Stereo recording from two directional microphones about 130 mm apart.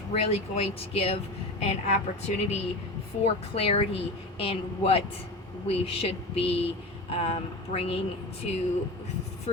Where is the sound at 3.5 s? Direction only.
50° left (ahead or behind).